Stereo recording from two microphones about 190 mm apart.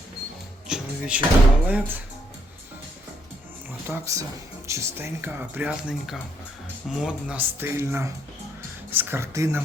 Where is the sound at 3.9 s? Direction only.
15° right (ahead or behind).